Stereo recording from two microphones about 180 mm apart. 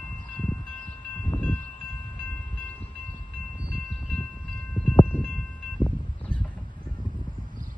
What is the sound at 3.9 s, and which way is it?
Train, 5° left (ahead or behind).